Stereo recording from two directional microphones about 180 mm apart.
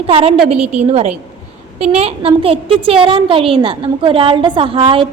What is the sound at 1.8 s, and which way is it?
A woman's voice, 35° right (ahead or behind).